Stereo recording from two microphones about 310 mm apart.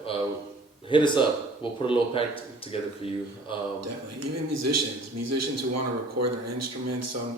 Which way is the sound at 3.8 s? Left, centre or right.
Right.